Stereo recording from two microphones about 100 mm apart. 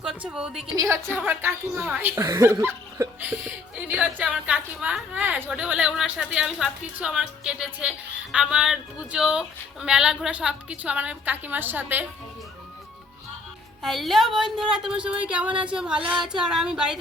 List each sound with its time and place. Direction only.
0.0 s a woman's voice: 10° right (ahead or behind)
1.2 s a woman's voice: 20° right (ahead or behind)
13.8 s a woman's voice: centre (ahead or behind)